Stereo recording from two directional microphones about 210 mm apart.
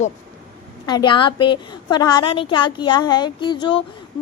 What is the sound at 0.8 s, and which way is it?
Speech, 20° left (ahead or behind).